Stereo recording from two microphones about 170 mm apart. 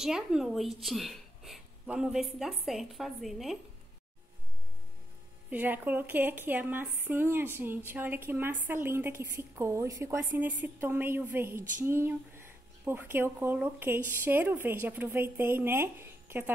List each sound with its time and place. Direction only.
0.0 s a woman's voice: 5° right (ahead or behind)
5.5 s speech: 10° right (ahead or behind)